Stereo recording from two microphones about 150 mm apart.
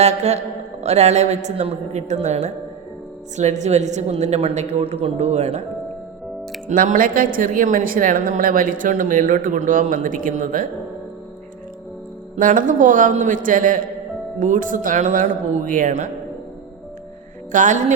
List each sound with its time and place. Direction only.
0.0 s a woman's voice: 50° right (ahead or behind)
6.7 s a woman's voice: 60° right (ahead or behind)
12.4 s a woman's voice: 60° right (ahead or behind)
17.5 s a woman's voice: 55° right (ahead or behind)